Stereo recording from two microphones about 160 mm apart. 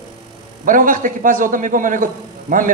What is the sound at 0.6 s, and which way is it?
A man's voice, 55° right (ahead or behind).